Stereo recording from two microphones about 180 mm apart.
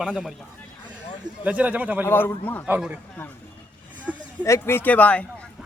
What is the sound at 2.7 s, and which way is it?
Speech, 5° right (ahead or behind).